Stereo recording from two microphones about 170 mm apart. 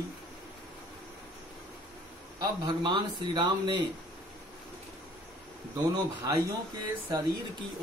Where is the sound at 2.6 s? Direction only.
25° right (ahead or behind).